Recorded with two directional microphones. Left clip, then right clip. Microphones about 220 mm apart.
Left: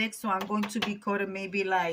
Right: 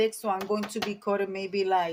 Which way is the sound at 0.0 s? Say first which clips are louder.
Right 3 dB; 25° right (ahead or behind).